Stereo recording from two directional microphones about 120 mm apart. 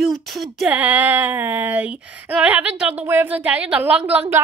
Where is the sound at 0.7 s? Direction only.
15° right (ahead or behind).